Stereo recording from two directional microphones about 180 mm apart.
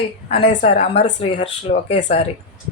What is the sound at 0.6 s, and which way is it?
Speech, 35° left (ahead or behind).